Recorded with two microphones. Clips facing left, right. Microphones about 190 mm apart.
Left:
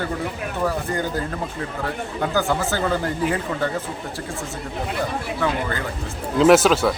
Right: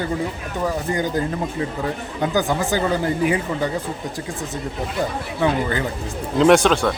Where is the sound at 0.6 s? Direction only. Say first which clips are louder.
Right 2 dB; 15° right (ahead or behind).